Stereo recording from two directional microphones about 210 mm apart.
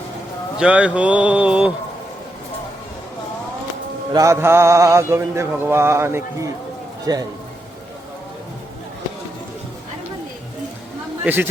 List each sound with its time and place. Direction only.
0.6 s speech: 5° right (ahead or behind)
4.1 s mantra: 15° right (ahead or behind)
7.0 s speech: 15° right (ahead or behind)
11.3 s mantra: 10° right (ahead or behind)